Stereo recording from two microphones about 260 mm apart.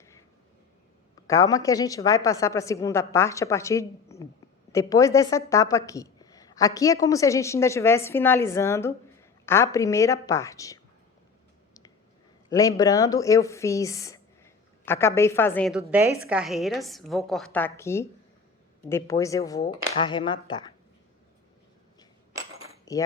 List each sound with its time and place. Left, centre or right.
1.3 s speech: centre
12.5 s speech: centre
22.9 s speech: centre